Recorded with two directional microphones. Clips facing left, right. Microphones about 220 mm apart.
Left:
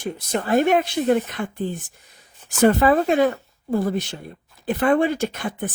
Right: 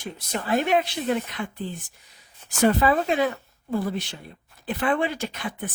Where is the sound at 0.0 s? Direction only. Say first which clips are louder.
Left 6 dB; 45° left (ahead or behind).